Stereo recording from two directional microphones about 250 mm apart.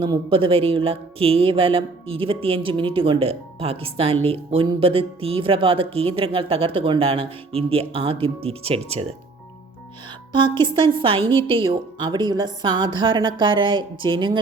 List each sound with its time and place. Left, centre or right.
0.0 s speech: right
10.6 s speech: centre